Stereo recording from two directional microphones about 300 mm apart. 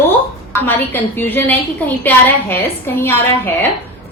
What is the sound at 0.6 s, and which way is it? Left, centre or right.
A woman's voice, centre.